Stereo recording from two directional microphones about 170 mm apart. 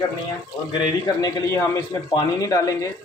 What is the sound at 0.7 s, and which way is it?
A man's voice, 20° left (ahead or behind).